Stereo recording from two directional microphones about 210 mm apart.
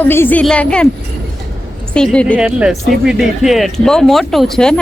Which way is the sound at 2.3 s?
5° right (ahead or behind).